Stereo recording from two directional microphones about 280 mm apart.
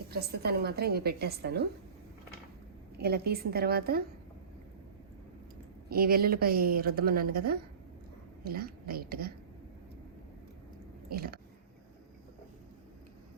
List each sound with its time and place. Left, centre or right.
0.1 s speech: right
3.0 s speech: right
5.9 s speech: right
11.1 s speech: right